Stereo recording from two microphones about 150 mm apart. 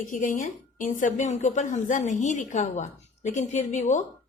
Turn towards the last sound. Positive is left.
turn(degrees=55)  # may be behind; listen again after turning